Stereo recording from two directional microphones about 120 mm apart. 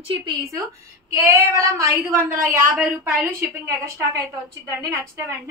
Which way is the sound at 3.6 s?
25° right (ahead or behind).